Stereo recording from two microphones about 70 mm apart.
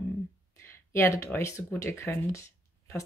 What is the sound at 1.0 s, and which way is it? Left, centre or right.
Speech, left.